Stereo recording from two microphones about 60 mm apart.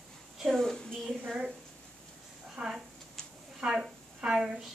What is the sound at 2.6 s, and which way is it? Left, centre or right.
A woman's voice, centre.